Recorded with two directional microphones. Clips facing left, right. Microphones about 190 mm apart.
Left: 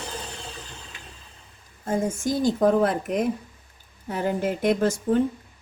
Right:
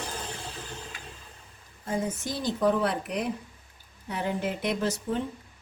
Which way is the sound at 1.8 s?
45° left (ahead or behind).